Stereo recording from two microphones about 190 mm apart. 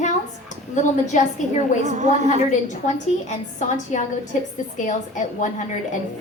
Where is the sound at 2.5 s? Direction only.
40° left (ahead or behind).